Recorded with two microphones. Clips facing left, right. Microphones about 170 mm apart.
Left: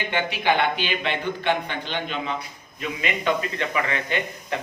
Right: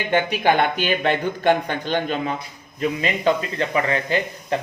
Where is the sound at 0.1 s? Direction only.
45° right (ahead or behind).